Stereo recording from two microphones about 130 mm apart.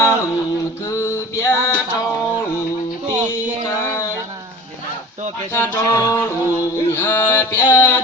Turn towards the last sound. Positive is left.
turn(degrees=20)  # may be behind; listen again after turning